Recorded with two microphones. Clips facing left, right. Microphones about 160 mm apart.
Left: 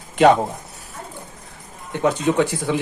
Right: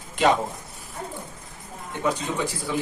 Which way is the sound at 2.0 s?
75° left (ahead or behind).